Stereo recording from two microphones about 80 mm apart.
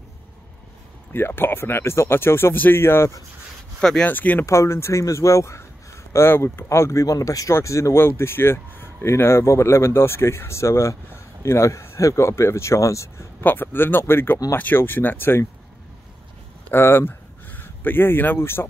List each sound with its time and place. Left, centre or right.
1.1 s speech: left
4.0 s speech: left
4.5 s speech: left
13.4 s speech: left
16.7 s speech: left